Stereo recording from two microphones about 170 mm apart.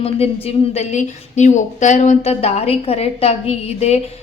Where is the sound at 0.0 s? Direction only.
35° left (ahead or behind).